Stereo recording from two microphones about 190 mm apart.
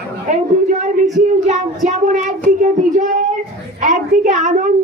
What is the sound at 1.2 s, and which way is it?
Child singing, 40° right (ahead or behind).